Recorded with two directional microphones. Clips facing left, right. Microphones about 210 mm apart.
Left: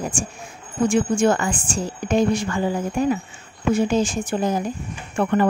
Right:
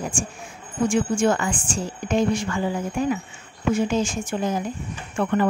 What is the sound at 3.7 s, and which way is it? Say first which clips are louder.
A woman's voice: left 3 dB; 35° left (ahead or behind).